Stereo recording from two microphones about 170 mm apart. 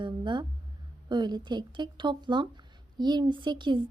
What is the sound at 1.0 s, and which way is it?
A woman's voice, 25° right (ahead or behind).